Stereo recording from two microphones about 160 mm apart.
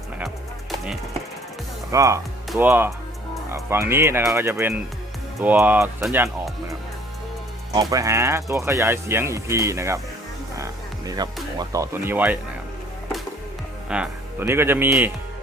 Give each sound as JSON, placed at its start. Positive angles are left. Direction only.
{"t": 1.9, "sound": "speech", "side_deg": -20}
{"t": 7.7, "sound": "speech", "side_deg": -25}
{"t": 10.6, "sound": "music", "side_deg": -25}
{"t": 11.5, "sound": "speech", "side_deg": -20}
{"t": 13.9, "sound": "speech", "side_deg": -10}